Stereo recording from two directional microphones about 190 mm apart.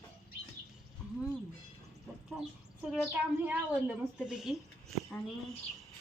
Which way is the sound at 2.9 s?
5° right (ahead or behind).